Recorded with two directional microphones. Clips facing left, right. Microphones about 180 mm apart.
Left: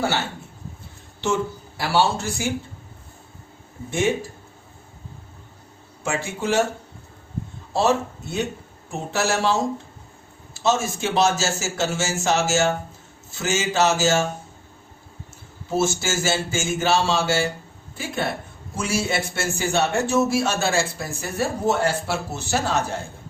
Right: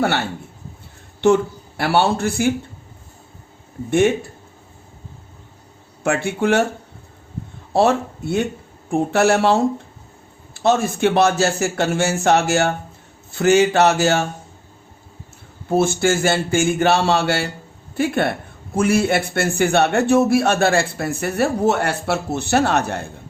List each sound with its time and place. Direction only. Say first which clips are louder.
1.2 s speech: right 8 dB; 60° right (ahead or behind)
3.8 s a man's voice: right 7 dB; 60° right (ahead or behind)
6.0 s a man's voice: right 7 dB; 60° right (ahead or behind)
7.7 s a man's voice: right 4 dB; 60° right (ahead or behind)
15.7 s a man's voice: right 6 dB; 55° right (ahead or behind)